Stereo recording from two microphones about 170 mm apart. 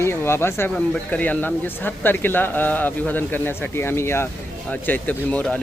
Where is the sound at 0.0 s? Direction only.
15° left (ahead or behind).